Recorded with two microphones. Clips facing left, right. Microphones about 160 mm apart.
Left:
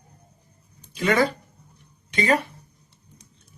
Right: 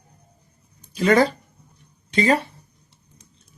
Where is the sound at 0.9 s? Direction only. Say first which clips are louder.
Right 4 dB; 40° right (ahead or behind).